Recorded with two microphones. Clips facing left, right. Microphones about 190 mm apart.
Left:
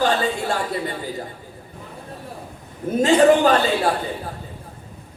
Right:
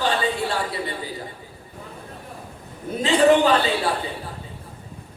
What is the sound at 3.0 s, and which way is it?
Speech, 45° left (ahead or behind).